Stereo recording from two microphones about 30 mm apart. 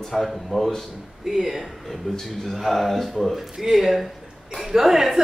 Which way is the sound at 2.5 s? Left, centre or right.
Centre.